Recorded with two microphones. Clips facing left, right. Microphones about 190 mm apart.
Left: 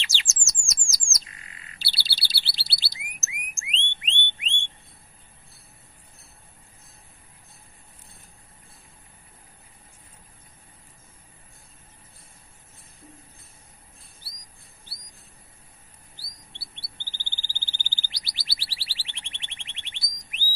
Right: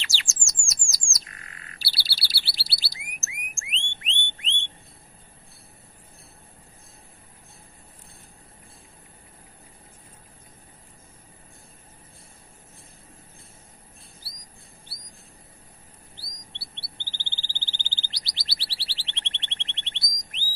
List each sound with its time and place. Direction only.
0.0 s bird: 20° left (ahead or behind)
2.0 s chirp: 20° left (ahead or behind)
17.1 s a sound: 15° left (ahead or behind)